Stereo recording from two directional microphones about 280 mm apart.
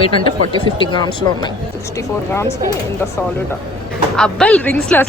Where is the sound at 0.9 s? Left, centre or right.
Centre.